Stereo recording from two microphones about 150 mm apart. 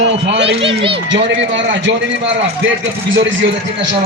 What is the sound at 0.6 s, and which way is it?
Speech, 35° right (ahead or behind).